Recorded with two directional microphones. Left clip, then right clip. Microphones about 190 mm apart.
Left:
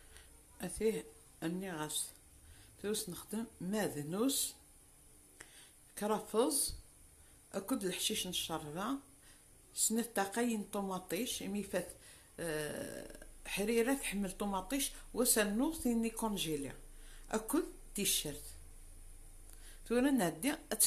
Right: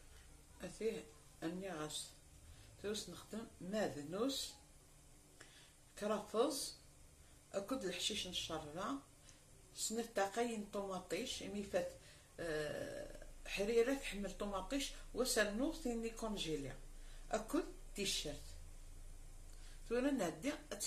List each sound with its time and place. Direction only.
0.6 s speech: 50° left (ahead or behind)
5.9 s speech: 55° left (ahead or behind)
19.9 s speech: 50° left (ahead or behind)